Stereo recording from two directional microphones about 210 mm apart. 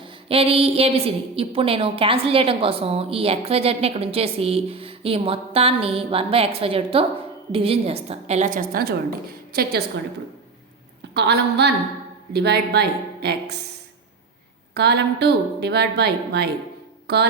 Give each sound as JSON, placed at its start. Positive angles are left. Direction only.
{"t": 0.0, "sound": "a woman's voice", "side_deg": -25}
{"t": 11.1, "sound": "speech", "side_deg": -55}
{"t": 14.7, "sound": "speech", "side_deg": -50}